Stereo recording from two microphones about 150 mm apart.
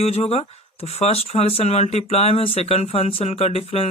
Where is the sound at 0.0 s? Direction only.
45° left (ahead or behind).